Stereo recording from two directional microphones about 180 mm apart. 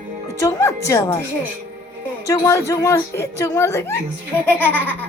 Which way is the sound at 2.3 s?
15° left (ahead or behind).